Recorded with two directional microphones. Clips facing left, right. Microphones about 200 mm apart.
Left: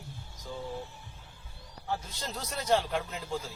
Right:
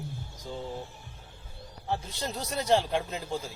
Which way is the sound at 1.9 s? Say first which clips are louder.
Right 3 dB; 25° right (ahead or behind).